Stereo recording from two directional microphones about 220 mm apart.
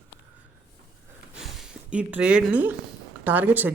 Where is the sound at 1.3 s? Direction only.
5° right (ahead or behind).